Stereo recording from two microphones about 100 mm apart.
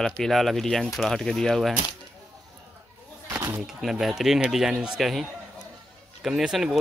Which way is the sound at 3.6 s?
5° right (ahead or behind).